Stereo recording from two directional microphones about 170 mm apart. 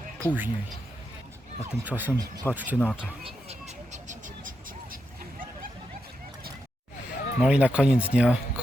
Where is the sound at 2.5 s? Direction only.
10° left (ahead or behind).